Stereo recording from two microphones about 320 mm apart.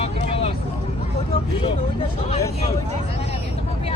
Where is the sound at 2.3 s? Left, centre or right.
Centre.